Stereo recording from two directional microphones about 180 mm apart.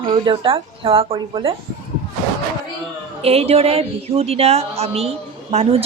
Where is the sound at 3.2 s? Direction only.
35° right (ahead or behind).